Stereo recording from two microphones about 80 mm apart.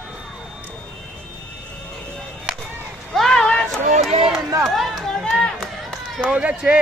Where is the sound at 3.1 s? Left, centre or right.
Centre.